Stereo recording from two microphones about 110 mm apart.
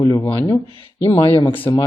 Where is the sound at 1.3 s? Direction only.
50° left (ahead or behind).